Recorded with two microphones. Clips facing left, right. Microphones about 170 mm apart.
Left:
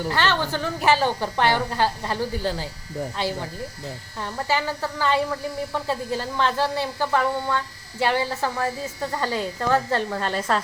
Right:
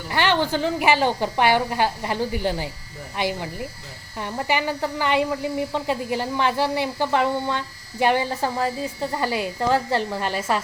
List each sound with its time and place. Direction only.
0.1 s speech: 15° right (ahead or behind)